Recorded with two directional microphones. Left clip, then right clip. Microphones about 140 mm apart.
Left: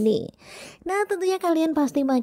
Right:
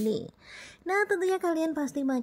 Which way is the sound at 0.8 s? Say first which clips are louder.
Left 3 dB; 35° left (ahead or behind).